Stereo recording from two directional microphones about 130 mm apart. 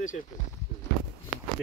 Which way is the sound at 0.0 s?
80° left.